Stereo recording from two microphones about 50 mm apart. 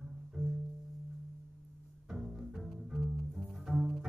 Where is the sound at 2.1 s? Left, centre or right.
Centre.